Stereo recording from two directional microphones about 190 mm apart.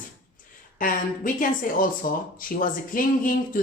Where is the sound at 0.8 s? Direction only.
45° left (ahead or behind).